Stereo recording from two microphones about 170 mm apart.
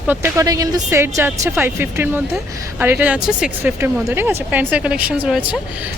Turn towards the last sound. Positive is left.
turn(degrees=-10)  # may be behind; listen again after turning